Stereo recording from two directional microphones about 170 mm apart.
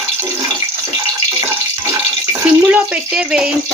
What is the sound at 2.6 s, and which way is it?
Water tap, 10° right (ahead or behind).